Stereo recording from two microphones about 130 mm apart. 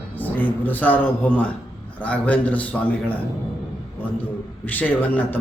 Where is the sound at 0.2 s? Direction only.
15° left (ahead or behind).